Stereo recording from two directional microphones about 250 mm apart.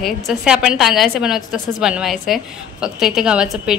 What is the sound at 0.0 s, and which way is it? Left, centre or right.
A woman's voice, centre.